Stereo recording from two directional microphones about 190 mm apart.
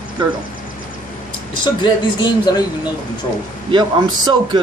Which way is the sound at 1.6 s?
20° left (ahead or behind).